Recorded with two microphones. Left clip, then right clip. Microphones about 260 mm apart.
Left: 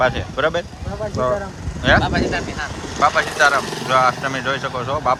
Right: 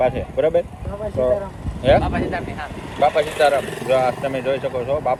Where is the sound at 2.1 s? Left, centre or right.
Left.